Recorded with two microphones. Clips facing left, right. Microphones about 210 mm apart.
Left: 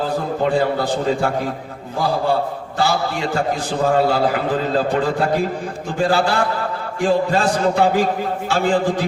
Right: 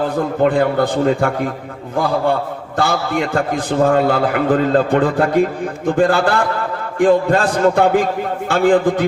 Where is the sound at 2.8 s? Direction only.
55° right (ahead or behind).